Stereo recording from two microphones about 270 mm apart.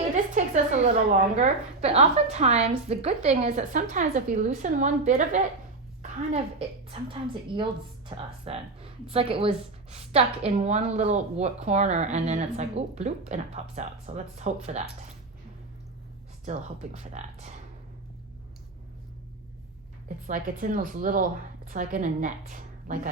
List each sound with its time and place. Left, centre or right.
0.3 s a sound: right
1.4 s a woman's voice: right
16.5 s a woman's voice: right
20.1 s a woman's voice: right